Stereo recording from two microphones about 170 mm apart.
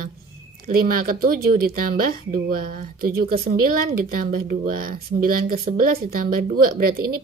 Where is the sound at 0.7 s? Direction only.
55° right (ahead or behind).